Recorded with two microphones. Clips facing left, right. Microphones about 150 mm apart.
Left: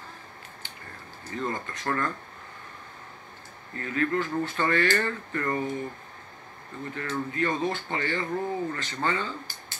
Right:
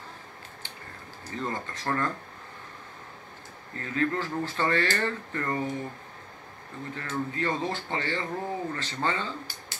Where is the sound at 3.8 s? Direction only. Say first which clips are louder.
Left 1 dB; 25° right (ahead or behind).